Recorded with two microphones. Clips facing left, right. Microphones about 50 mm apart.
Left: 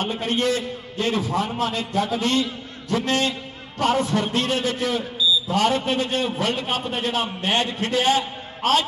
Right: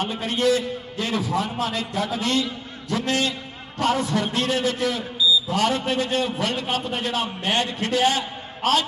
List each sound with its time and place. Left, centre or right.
0.0 s a man's voice: left